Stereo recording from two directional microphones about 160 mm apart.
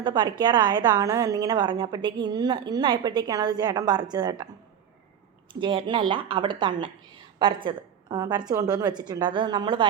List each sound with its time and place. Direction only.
0.0 s a woman's voice: 30° right (ahead or behind)
5.5 s a woman's voice: 30° right (ahead or behind)